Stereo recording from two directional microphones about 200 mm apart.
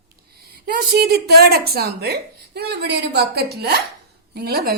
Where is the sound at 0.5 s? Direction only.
50° right (ahead or behind).